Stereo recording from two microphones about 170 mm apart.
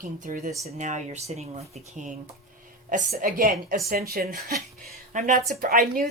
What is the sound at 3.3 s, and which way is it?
Speech, 55° right (ahead or behind).